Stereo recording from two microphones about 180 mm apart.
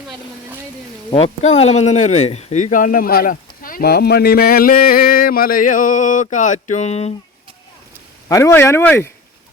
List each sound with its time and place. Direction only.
1.1 s speech: 35° left (ahead or behind)
8.3 s speech: 15° left (ahead or behind)